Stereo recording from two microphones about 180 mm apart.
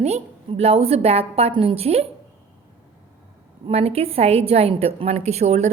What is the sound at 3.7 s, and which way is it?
A woman's voice, 35° right (ahead or behind).